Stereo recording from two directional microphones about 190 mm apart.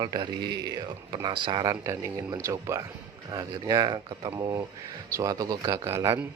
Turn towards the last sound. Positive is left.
turn(degrees=-15)  # may be behind; listen again after turning